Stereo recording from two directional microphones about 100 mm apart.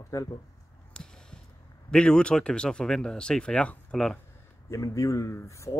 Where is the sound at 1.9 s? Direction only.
10° left (ahead or behind).